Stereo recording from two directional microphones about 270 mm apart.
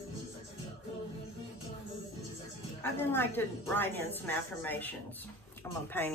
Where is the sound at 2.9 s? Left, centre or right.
Centre.